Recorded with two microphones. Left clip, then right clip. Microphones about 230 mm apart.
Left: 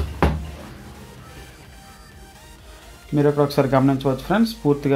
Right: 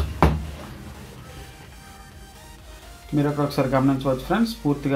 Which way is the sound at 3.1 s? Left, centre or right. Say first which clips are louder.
Left 5 dB; left.